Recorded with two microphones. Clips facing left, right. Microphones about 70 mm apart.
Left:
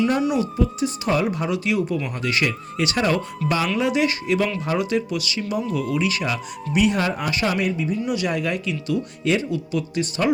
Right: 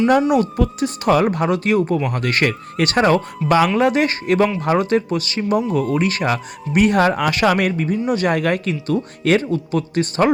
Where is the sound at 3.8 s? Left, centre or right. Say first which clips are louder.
Right 4 dB; right.